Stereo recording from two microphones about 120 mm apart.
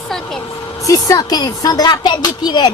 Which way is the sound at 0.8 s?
30° left (ahead or behind).